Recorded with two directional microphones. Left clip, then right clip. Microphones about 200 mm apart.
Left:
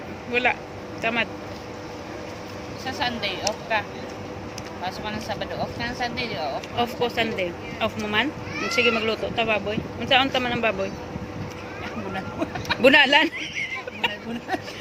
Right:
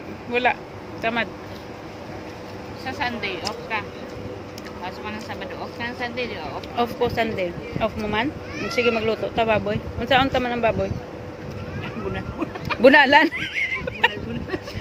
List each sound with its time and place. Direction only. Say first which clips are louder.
0.3 s speech: right 1 dB; 10° right (ahead or behind)
2.8 s speech: even; 15° left (ahead or behind); by 6.5 s 30° left (ahead or behind)
6.7 s speech: right 3 dB; 15° right (ahead or behind)
12.8 s speech: right 3 dB; 20° right (ahead or behind)
13.4 s a sound: right 4 dB; 40° right (ahead or behind)